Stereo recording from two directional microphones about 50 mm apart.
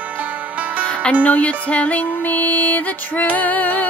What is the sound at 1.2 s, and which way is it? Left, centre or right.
Music, left.